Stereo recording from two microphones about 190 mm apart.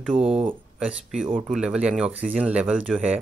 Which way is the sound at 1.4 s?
5° right (ahead or behind).